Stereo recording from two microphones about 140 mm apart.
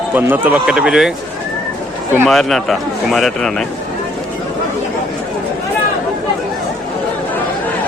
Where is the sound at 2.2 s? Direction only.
Centre (ahead or behind).